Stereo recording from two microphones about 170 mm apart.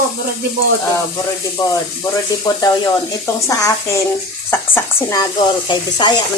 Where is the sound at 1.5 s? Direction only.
20° left (ahead or behind).